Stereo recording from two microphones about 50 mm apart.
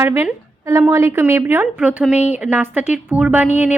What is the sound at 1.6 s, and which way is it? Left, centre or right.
Speech, right.